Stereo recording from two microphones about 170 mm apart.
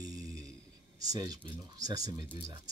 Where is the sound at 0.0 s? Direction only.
20° right (ahead or behind).